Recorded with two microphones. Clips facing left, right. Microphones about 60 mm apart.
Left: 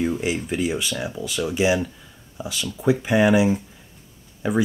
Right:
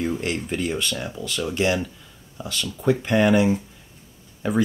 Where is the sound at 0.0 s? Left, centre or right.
Centre.